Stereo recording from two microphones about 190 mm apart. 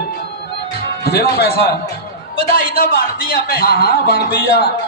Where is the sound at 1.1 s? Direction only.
55° left (ahead or behind).